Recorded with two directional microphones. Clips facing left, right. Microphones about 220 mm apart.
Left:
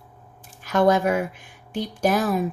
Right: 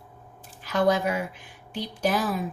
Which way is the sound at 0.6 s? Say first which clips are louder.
Left 4 dB; 50° left (ahead or behind).